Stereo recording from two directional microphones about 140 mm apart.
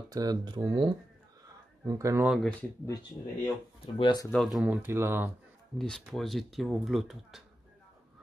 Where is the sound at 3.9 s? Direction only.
30° left (ahead or behind).